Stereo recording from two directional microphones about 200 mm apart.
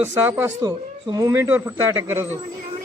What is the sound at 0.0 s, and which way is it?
Speech, 10° right (ahead or behind).